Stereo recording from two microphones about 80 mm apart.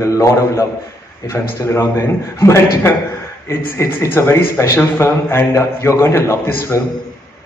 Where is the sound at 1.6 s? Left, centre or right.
Left.